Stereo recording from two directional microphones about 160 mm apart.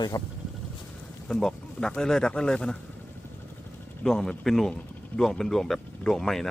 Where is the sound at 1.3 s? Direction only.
5° left (ahead or behind).